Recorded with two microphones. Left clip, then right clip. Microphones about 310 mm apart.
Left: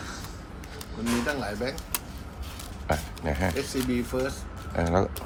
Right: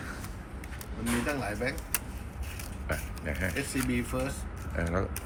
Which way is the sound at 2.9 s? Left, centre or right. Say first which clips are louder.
Left 7 dB; centre.